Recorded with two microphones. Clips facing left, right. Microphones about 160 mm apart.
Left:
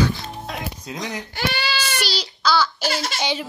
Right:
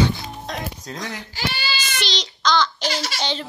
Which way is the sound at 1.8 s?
10° left (ahead or behind).